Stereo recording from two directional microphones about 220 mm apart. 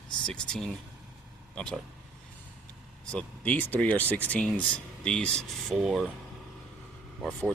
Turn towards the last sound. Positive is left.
turn(degrees=5)  # may be behind; listen again after turning